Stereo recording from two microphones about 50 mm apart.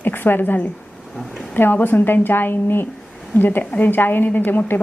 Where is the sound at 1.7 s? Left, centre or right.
Left.